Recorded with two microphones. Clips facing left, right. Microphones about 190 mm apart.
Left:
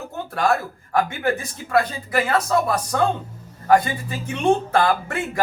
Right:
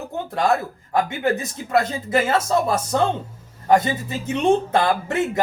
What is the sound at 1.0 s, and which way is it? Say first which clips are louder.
Speech: right 1 dB; 20° right (ahead or behind).